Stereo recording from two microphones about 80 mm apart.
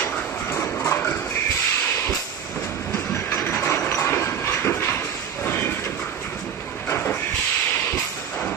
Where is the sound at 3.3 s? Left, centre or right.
Left.